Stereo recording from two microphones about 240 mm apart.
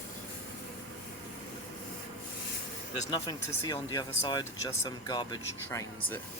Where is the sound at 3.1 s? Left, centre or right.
Centre.